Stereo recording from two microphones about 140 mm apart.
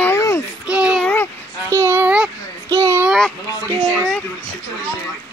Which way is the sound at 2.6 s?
25° right (ahead or behind).